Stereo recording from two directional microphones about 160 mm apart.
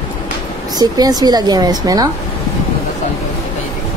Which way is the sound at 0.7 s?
25° right (ahead or behind).